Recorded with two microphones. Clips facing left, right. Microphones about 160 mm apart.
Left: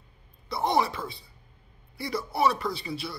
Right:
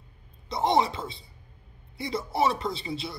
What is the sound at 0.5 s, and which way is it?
A man's voice, 20° right (ahead or behind).